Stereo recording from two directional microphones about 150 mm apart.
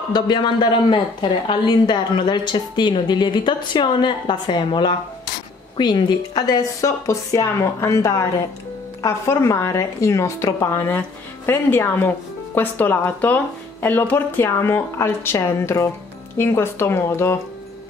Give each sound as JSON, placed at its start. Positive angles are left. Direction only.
{"t": 0.1, "sound": "a woman's voice", "side_deg": 30}